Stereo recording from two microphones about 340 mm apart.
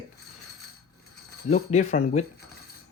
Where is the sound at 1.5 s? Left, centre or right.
Centre.